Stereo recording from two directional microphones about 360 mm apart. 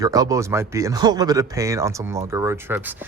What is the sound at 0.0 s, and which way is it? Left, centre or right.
Speech, centre.